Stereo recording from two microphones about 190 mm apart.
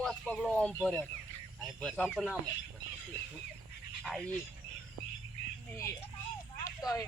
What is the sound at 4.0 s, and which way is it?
Speech, centre (ahead or behind).